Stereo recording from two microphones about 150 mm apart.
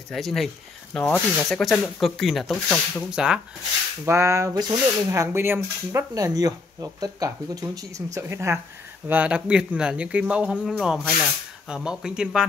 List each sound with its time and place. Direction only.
0.1 s speech: centre (ahead or behind)
4.0 s speech: 20° right (ahead or behind)